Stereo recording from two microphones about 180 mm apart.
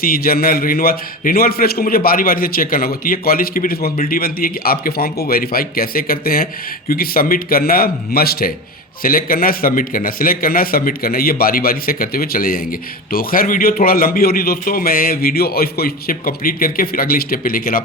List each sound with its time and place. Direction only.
0.0 s a man's voice: 55° left (ahead or behind)